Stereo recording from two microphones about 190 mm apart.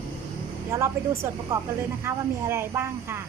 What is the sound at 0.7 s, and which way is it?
Speech, 15° right (ahead or behind).